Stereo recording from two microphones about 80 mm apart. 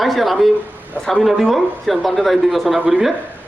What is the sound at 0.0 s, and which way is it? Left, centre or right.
A man's voice, centre.